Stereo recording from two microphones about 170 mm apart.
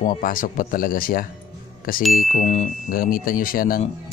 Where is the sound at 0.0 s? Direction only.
50° left (ahead or behind).